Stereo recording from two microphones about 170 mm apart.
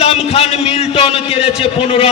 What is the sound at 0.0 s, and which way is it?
A man's voice, 35° left (ahead or behind).